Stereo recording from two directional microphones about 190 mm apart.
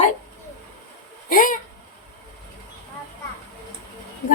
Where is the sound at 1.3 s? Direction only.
45° left (ahead or behind).